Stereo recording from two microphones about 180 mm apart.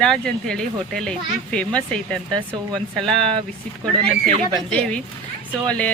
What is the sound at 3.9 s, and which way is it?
Speech, 40° right (ahead or behind).